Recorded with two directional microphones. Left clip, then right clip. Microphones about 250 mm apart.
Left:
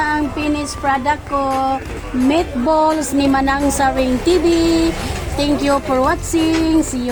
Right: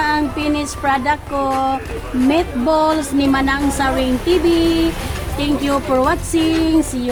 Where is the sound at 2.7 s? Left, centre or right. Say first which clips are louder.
Left 1 dB; centre.